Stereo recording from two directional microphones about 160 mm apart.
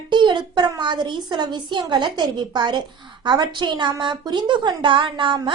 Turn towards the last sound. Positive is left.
turn(degrees=-30)  # may be behind; listen again after turning